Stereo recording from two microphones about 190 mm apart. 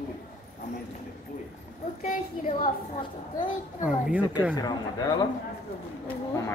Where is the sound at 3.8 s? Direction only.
5° right (ahead or behind).